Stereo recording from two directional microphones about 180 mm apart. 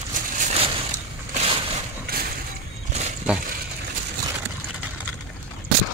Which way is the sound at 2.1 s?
60° right (ahead or behind).